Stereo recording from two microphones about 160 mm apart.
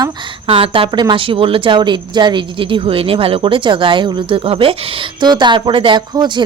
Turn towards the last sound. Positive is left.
turn(degrees=-30)  # may be behind; listen again after turning